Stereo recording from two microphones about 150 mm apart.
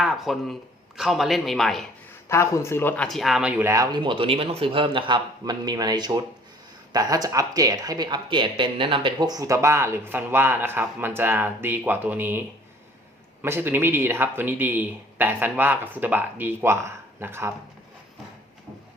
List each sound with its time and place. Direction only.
0.0 s a man's voice: centre (ahead or behind)
2.3 s speech: 20° left (ahead or behind); by 3.7 s 5° right (ahead or behind)
3.7 s a man's voice: 25° right (ahead or behind)